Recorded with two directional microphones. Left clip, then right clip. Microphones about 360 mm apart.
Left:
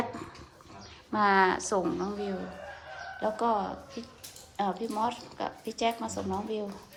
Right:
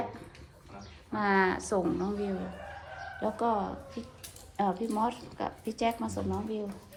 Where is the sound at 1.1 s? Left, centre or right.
Centre.